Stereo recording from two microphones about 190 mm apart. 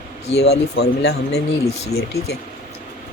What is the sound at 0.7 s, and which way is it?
Speech, 65° left (ahead or behind).